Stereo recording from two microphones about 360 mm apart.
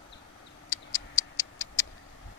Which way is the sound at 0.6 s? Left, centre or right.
Centre.